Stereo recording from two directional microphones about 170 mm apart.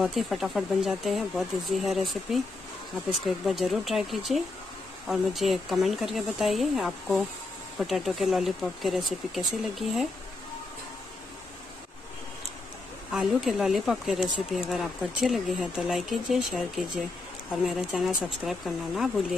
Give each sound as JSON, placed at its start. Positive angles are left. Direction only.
{"t": 0.0, "sound": "speech", "side_deg": 0}
{"t": 3.4, "sound": "speech", "side_deg": 0}
{"t": 13.1, "sound": "speech", "side_deg": 0}